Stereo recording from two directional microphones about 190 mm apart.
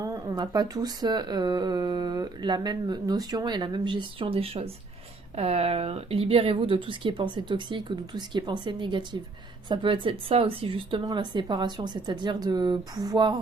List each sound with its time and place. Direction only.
0.0 s speech: 20° right (ahead or behind)